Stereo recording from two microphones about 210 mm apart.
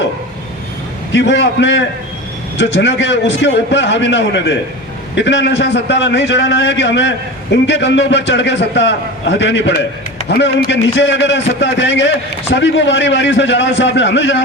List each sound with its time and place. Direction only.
1.1 s a man's voice: 55° left (ahead or behind)